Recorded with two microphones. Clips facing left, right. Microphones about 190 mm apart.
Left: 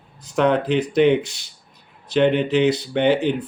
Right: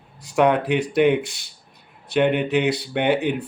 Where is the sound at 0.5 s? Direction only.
65° right (ahead or behind).